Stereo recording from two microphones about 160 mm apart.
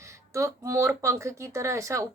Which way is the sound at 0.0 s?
20° right (ahead or behind).